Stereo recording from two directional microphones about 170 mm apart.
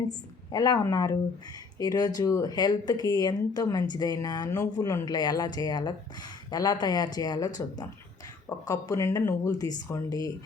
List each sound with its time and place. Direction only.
0.5 s speech: 20° left (ahead or behind)